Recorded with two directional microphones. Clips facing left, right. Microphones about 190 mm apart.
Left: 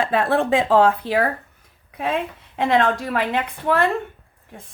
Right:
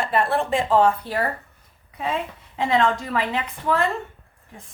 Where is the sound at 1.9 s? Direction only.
65° left (ahead or behind).